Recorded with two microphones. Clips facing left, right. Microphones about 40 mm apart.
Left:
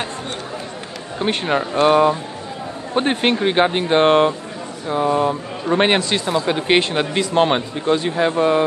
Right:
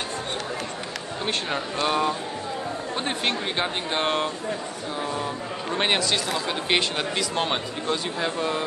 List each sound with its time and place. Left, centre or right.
1.2 s a man's voice: left